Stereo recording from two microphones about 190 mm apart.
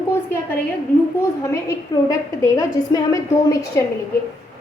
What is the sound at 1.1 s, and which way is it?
A woman's voice, 15° left (ahead or behind).